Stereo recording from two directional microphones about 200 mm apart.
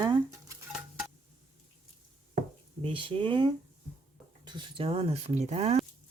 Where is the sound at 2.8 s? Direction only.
25° right (ahead or behind).